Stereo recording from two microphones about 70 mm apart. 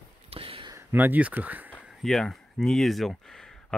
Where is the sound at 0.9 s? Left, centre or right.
Right.